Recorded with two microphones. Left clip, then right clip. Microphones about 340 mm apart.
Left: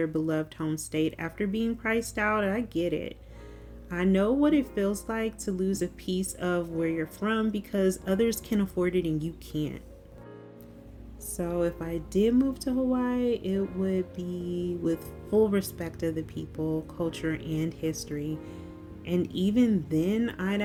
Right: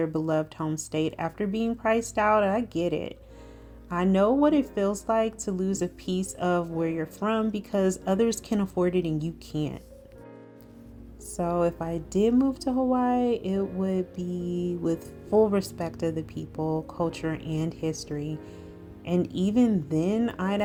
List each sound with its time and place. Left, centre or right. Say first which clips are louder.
0.0 s speech: right 2 dB; centre
11.3 s speech: right 4 dB; centre